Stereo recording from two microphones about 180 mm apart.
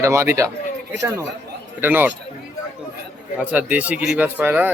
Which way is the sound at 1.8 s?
10° right (ahead or behind).